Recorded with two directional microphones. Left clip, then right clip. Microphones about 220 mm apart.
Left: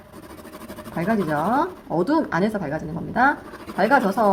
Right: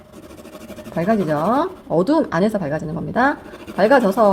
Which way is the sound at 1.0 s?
35° right (ahead or behind).